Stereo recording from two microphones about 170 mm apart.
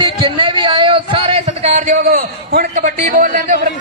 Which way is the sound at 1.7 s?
55° right (ahead or behind).